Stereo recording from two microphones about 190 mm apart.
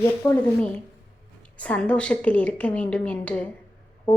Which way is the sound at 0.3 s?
10° left (ahead or behind).